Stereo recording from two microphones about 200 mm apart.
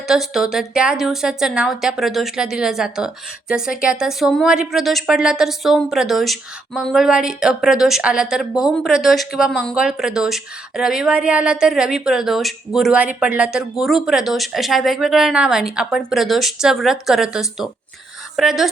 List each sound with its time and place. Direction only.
0.1 s speech: centre (ahead or behind)